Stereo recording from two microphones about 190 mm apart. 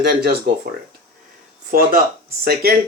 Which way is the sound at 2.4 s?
55° right (ahead or behind).